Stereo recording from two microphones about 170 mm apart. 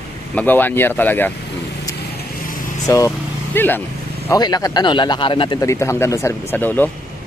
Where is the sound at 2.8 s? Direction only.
20° left (ahead or behind).